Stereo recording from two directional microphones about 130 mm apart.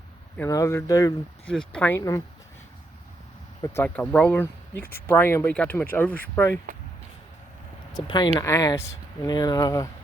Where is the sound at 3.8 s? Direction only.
10° left (ahead or behind).